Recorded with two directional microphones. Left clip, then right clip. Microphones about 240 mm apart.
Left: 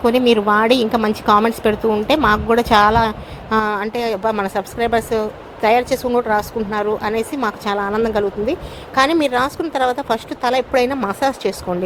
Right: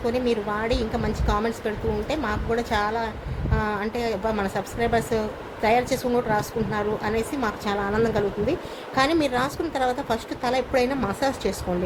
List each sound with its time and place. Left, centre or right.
0.0 s a woman's voice: left